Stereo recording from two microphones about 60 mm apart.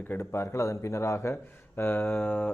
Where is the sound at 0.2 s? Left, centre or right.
Left.